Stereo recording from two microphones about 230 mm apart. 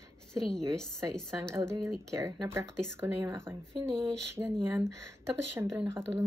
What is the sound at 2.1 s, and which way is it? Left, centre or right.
A woman's voice, centre.